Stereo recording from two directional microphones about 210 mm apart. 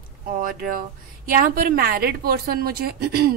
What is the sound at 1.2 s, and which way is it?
A woman's voice, 40° right (ahead or behind).